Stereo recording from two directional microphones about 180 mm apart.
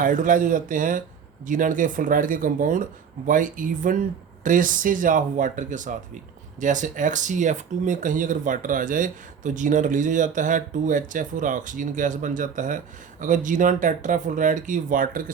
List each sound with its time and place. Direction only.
0.0 s speech: 45° right (ahead or behind)